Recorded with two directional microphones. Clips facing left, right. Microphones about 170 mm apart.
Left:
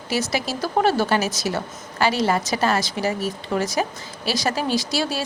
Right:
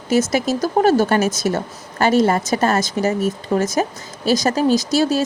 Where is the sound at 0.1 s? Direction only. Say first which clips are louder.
Right 7 dB; 45° right (ahead or behind).